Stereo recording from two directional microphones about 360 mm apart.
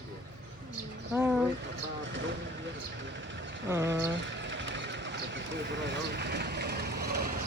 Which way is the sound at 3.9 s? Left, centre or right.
Right.